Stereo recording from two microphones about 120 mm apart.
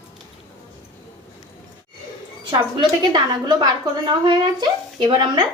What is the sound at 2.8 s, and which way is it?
A woman's voice, 40° right (ahead or behind).